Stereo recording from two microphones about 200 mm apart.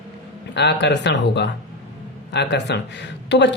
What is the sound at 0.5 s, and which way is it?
A woman's voice, 60° left (ahead or behind).